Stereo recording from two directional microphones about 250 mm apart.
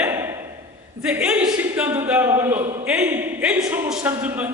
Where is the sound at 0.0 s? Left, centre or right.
Centre.